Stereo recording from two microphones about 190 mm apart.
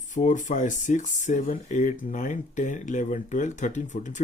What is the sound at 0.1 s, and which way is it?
Speech, 40° left (ahead or behind).